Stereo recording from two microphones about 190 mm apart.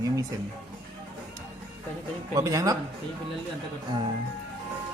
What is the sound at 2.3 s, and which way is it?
Speech, 15° right (ahead or behind).